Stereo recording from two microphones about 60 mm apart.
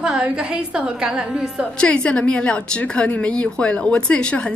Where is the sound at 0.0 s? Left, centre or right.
Centre.